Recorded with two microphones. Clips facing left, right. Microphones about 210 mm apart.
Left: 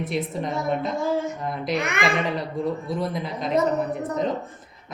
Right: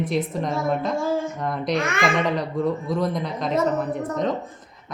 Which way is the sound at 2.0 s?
Centre (ahead or behind).